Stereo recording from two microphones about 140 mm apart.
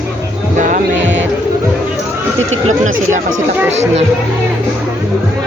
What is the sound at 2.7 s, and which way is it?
Speech, 60° right (ahead or behind).